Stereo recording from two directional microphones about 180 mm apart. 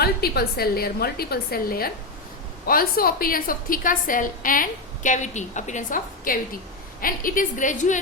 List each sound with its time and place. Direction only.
0.0 s a woman's voice: 60° left (ahead or behind); by 8.0 s 45° left (ahead or behind)